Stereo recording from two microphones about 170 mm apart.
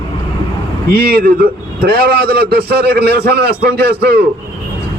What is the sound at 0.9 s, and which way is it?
A man's voice, 65° right (ahead or behind).